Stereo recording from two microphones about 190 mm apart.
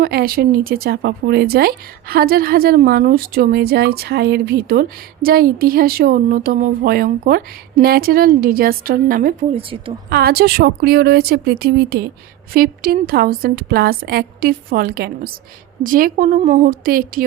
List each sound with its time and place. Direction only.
0.0 s a woman's voice: 55° right (ahead or behind)
9.6 s speech: 30° right (ahead or behind)
10.1 s a woman's voice: 55° right (ahead or behind)